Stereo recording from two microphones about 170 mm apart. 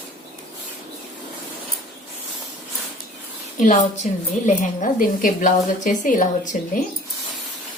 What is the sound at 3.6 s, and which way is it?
A woman's voice, 45° left (ahead or behind).